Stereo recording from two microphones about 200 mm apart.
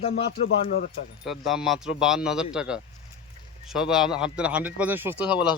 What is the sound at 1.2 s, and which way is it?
Speech, centre (ahead or behind).